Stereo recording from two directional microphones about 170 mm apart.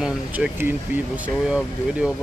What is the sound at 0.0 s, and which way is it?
Speech, 10° right (ahead or behind).